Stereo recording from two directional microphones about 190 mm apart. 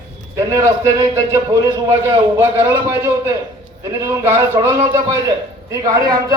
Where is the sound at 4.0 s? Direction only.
15° right (ahead or behind).